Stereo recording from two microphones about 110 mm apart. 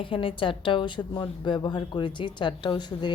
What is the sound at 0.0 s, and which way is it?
A woman's voice, 50° left (ahead or behind).